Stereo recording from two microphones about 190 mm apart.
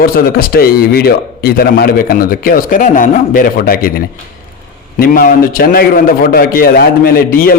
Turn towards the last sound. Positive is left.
turn(degrees=50)  # may be behind; listen again after turning